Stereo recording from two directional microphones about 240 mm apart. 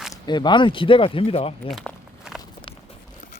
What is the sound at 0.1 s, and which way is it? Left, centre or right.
Speech, centre.